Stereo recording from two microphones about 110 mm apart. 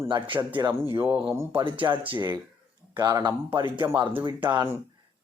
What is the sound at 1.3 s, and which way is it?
Speech, 25° right (ahead or behind).